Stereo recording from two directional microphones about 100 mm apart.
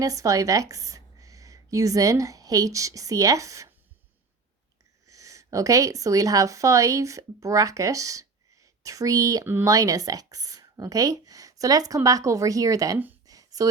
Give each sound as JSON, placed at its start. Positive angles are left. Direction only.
{"t": 0.0, "sound": "speech", "side_deg": -35}
{"t": 5.0, "sound": "speech", "side_deg": -35}
{"t": 13.2, "sound": "a sound", "side_deg": -35}